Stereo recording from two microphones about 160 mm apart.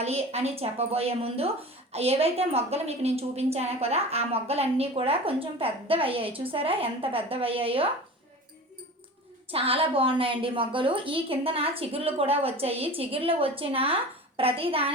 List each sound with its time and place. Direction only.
0.0 s a woman's voice: 40° right (ahead or behind)
9.5 s a woman's voice: 35° right (ahead or behind)